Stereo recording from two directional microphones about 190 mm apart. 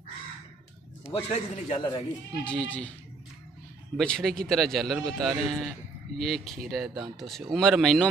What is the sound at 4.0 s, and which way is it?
A man's voice, 5° left (ahead or behind).